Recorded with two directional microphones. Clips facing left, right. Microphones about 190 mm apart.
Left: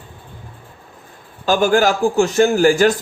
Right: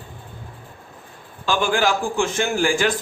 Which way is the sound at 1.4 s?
40° left (ahead or behind).